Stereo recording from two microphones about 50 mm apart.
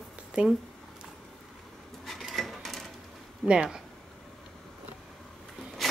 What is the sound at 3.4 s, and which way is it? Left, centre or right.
Speech, centre.